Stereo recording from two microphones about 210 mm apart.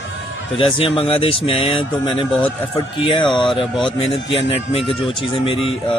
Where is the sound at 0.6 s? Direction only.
25° left (ahead or behind).